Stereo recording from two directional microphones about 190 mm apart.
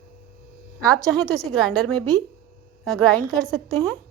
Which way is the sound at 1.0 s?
15° right (ahead or behind).